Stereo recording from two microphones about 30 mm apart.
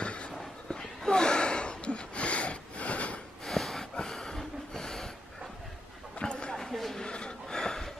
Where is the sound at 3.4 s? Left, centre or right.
Centre.